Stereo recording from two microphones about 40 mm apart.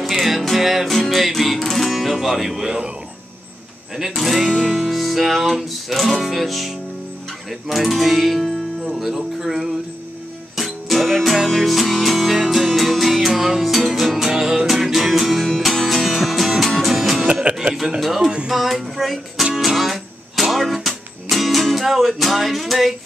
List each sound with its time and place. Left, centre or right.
0.1 s music: centre
2.6 s speech: centre
3.9 s music: centre
7.6 s speech: centre
10.5 s music: centre
17.3 s music: right
18.0 s music: centre